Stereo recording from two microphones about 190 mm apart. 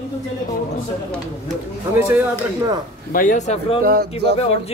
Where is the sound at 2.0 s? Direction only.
15° right (ahead or behind).